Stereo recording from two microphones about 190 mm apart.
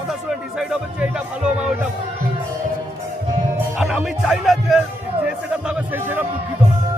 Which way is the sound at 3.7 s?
Centre (ahead or behind).